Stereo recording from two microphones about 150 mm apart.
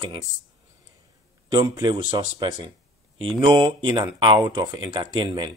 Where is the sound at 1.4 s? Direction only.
25° right (ahead or behind).